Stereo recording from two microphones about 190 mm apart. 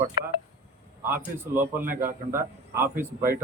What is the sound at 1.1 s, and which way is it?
Speech, 10° right (ahead or behind).